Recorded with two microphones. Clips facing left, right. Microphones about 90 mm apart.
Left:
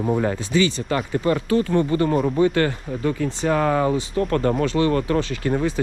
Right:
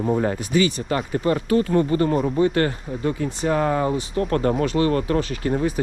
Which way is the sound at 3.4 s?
60° left (ahead or behind).